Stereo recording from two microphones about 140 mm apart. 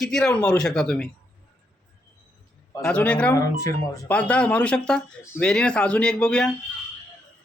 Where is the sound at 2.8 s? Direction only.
10° left (ahead or behind).